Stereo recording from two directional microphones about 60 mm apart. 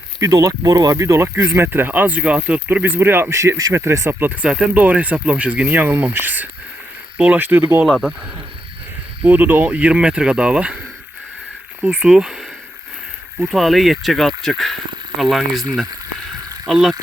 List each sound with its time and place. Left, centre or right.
0.2 s speech: right
2.7 s speech: right
3.2 s speech: right
4.7 s speech: right
7.9 s speech: centre
9.2 s speech: right
11.9 s speech: centre
13.5 s speech: centre
16.6 s speech: centre